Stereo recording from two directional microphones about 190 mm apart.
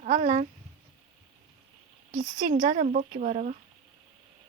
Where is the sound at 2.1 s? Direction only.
40° right (ahead or behind).